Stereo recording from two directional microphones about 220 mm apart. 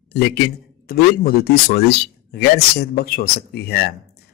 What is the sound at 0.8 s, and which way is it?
Speech, 45° left (ahead or behind).